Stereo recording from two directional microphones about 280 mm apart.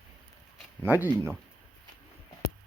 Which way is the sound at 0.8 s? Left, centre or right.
Centre.